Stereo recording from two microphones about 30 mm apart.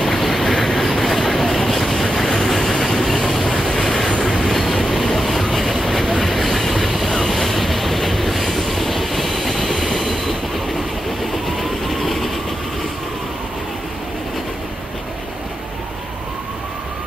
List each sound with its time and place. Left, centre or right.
0.0 s train: centre
4.1 s train: left
4.4 s train: centre
6.1 s vehicle: centre